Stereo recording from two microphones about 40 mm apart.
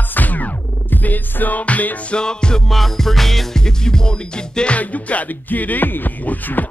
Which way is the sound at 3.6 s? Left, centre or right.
Centre.